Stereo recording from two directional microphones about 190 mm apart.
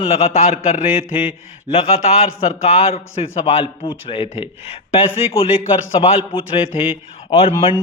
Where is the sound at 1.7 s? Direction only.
35° left (ahead or behind).